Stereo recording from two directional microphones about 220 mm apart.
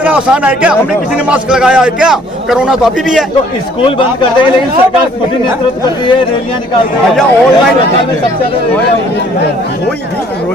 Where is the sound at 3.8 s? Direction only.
25° left (ahead or behind).